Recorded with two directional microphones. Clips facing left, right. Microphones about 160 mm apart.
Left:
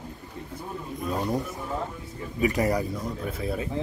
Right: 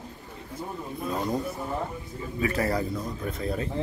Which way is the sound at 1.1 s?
10° left (ahead or behind).